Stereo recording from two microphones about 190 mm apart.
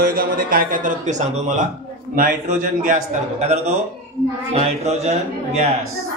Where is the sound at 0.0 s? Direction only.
50° right (ahead or behind).